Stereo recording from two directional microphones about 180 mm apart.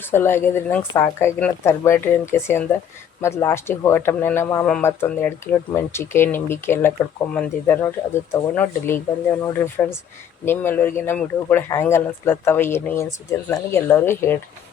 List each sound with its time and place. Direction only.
0.1 s speech: 15° left (ahead or behind)